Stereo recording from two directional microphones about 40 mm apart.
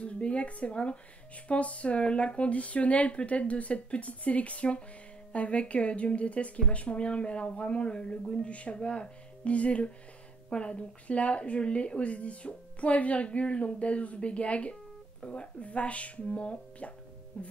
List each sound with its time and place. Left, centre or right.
0.0 s a woman's voice: left